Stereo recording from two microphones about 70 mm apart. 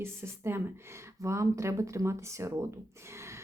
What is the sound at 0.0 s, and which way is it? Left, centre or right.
A woman's voice, right.